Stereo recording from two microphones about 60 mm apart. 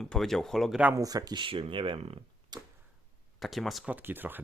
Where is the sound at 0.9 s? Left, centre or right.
Right.